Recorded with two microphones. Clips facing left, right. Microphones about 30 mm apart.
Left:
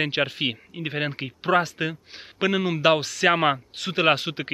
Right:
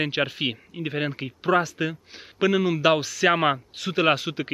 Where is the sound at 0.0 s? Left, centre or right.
Centre.